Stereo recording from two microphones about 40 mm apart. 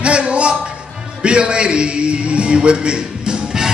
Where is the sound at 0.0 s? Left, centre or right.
Right.